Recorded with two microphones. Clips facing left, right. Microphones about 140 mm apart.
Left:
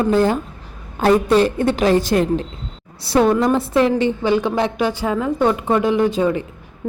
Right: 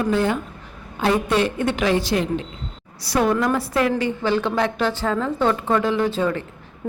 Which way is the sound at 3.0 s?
25° left (ahead or behind).